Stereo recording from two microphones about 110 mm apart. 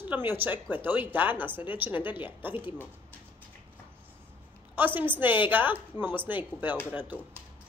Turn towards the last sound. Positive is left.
turn(degrees=-15)  # may be behind; listen again after turning